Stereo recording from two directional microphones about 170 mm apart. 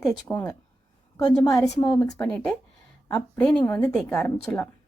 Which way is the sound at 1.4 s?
20° left (ahead or behind).